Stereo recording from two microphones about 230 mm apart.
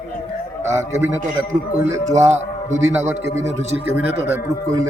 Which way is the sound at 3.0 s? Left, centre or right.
Centre.